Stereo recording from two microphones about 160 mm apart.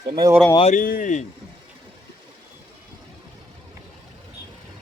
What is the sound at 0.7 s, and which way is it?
Speech, 60° left (ahead or behind).